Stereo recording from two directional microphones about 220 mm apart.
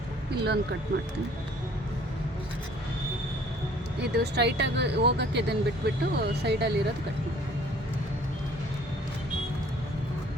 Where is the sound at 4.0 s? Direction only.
50° right (ahead or behind).